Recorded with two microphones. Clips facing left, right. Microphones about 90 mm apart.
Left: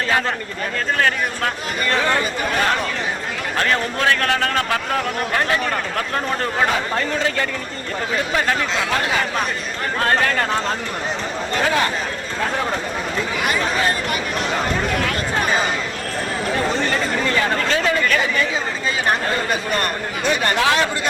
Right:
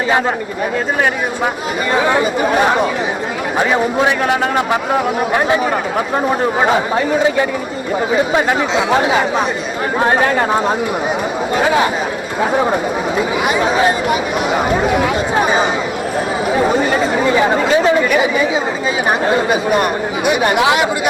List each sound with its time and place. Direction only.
1.9 s speech: 15° right (ahead or behind)